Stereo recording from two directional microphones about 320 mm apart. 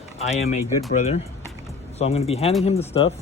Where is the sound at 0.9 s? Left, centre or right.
Left.